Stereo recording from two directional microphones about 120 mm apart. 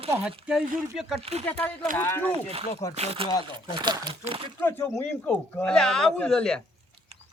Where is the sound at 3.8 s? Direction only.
40° right (ahead or behind).